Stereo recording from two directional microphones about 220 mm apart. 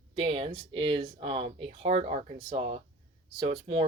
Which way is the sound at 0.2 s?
20° right (ahead or behind).